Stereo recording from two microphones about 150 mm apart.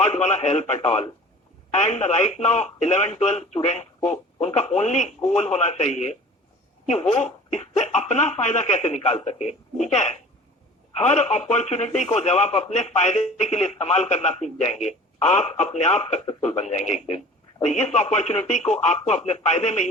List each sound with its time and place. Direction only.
0.0 s speech: 50° left (ahead or behind)